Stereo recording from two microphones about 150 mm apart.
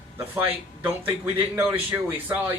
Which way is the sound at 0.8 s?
15° right (ahead or behind).